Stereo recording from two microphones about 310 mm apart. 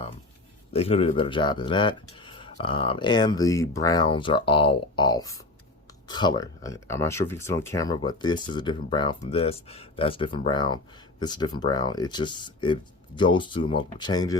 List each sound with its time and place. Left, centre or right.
0.7 s speech: centre